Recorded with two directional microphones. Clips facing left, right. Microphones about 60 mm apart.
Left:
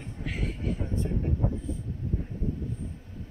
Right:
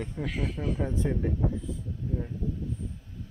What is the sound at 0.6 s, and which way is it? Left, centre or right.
Speech, right.